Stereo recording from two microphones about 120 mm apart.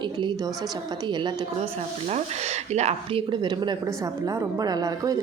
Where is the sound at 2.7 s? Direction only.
60° right (ahead or behind).